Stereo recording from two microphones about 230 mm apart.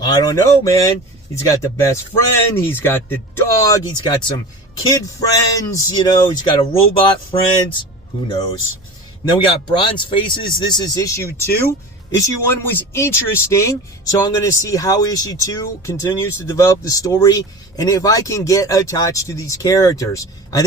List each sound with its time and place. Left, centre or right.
0.0 s speech: centre